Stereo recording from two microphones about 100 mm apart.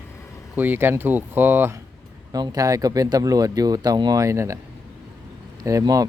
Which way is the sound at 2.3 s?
40° right (ahead or behind).